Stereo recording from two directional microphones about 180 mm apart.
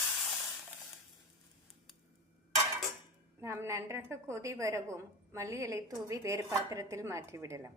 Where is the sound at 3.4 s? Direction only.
15° right (ahead or behind).